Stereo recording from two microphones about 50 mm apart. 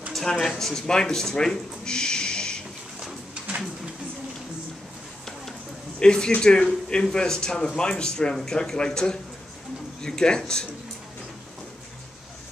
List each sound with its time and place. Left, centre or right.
0.1 s speech: centre
5.9 s speech: centre